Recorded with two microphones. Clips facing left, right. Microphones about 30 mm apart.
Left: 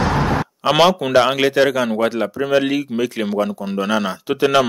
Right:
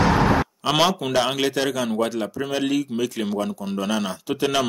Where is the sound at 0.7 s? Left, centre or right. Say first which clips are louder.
Left 7 dB; centre.